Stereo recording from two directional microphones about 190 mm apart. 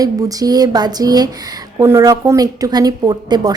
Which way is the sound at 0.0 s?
20° right (ahead or behind).